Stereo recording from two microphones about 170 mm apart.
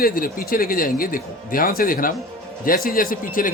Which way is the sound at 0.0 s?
55° left (ahead or behind).